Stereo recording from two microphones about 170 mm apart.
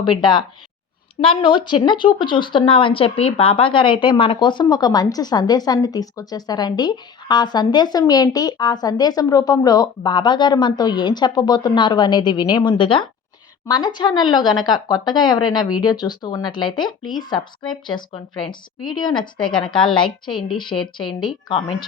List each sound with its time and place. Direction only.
0.0 s speech: 30° left (ahead or behind)